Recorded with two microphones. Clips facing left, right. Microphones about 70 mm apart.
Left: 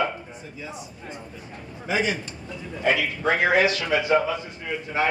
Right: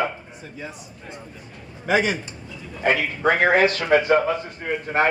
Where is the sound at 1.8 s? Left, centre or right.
Right.